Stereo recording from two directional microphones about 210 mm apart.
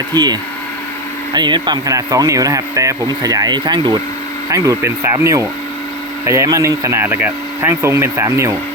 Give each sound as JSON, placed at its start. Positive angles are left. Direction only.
{"t": 0.1, "sound": "speech", "side_deg": -20}